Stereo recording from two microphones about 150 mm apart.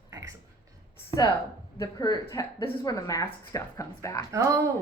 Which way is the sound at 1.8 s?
25° left (ahead or behind).